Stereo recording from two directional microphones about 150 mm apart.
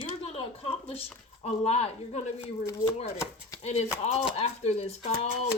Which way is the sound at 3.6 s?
45° left (ahead or behind).